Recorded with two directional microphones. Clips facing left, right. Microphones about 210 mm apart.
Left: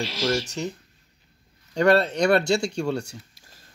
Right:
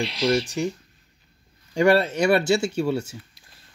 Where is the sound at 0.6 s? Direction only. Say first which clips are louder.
Right 4 dB; 10° right (ahead or behind).